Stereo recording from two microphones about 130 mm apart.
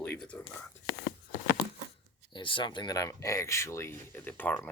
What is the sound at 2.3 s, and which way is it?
Speech, 40° left (ahead or behind).